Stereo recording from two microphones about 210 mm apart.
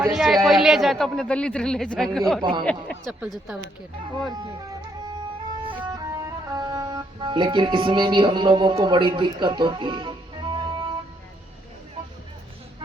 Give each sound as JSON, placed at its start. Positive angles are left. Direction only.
{"t": 0.1, "sound": "speech", "side_deg": 0}
{"t": 2.4, "sound": "speech", "side_deg": -20}
{"t": 3.1, "sound": "speech", "side_deg": 0}
{"t": 4.3, "sound": "music", "side_deg": -20}